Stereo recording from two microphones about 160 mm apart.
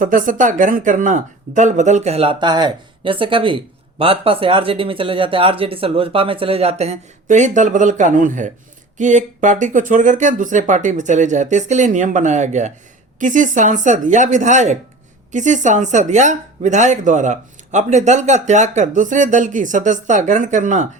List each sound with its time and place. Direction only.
0.0 s speech: 60° right (ahead or behind)